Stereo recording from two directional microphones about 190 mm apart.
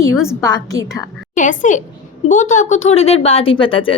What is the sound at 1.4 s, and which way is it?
A woman's voice, 45° left (ahead or behind).